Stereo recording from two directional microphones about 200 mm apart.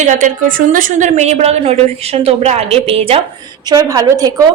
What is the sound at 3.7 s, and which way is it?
Speech, 20° right (ahead or behind).